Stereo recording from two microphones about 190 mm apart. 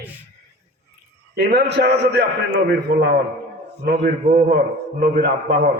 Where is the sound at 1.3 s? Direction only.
60° right (ahead or behind).